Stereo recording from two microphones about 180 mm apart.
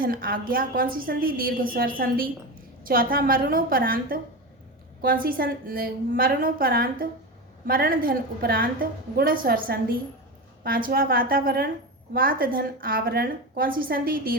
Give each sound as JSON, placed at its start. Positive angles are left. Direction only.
{"t": 0.0, "sound": "a woman's voice", "side_deg": -55}